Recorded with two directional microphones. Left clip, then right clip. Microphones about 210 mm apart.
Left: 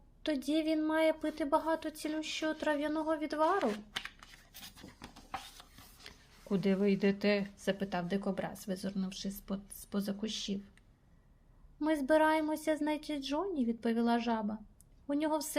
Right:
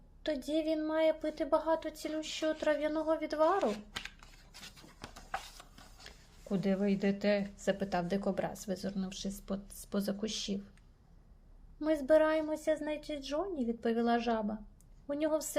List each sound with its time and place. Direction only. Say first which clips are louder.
0.2 s a woman's voice: even; 10° left (ahead or behind)
3.6 s speech: right 1 dB; 25° left (ahead or behind)
6.1 s a woman's voice: left 2 dB; 5° left (ahead or behind)
11.8 s a woman's voice: right 1 dB; 5° left (ahead or behind)